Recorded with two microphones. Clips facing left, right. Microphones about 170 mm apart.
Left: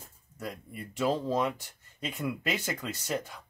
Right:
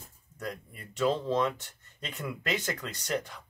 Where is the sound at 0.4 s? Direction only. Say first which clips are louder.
Even; 10° left (ahead or behind).